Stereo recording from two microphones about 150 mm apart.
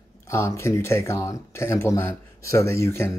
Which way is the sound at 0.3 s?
20° left (ahead or behind).